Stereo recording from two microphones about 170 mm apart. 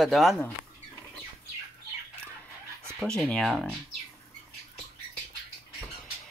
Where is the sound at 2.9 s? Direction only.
5° left (ahead or behind).